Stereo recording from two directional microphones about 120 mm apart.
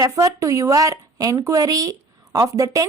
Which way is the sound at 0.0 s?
25° right (ahead or behind).